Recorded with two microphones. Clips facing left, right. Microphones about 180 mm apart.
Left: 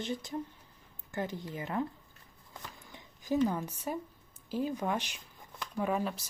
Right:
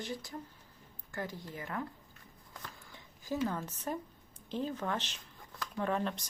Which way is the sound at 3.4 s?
10° left (ahead or behind).